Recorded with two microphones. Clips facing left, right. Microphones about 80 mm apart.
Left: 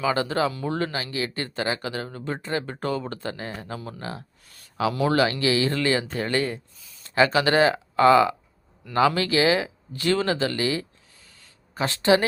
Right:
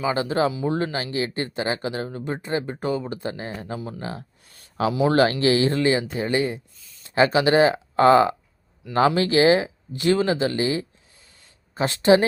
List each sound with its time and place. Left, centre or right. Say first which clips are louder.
0.0 s speech: right 1 dB; centre
4.0 s a sound: right 2 dB; right
5.1 s speech: right 3 dB; right; by 6.6 s centre
6.7 s speech: left 2 dB; centre
7.2 s speech: right 2 dB; right
11.3 s a sound: right 3 dB; right